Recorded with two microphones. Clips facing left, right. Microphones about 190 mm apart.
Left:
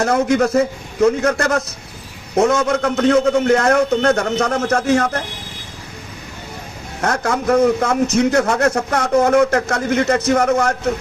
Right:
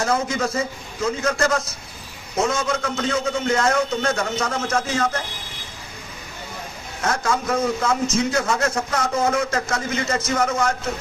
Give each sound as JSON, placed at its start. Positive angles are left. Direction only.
{"t": 0.0, "sound": "a man's voice", "side_deg": 65}
{"t": 7.0, "sound": "a man's voice", "side_deg": 65}